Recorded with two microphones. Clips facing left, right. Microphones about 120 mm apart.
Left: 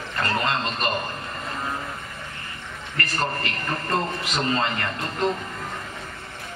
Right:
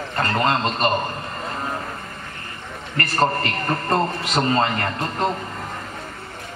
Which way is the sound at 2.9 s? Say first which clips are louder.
Right 7 dB; 40° right (ahead or behind).